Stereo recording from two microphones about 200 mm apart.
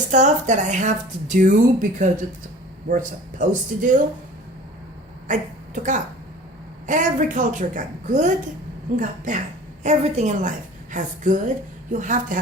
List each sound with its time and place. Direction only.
0.1 s speech: 35° right (ahead or behind)
5.3 s speech: 40° right (ahead or behind)